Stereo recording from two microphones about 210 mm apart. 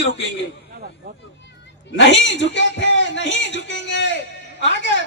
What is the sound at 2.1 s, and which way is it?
A man's voice, 60° left (ahead or behind).